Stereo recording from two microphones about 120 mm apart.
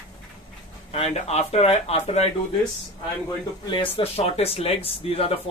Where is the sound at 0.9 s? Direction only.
65° left (ahead or behind).